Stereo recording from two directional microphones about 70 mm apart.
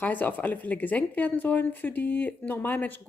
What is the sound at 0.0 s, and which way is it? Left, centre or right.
Speech, left.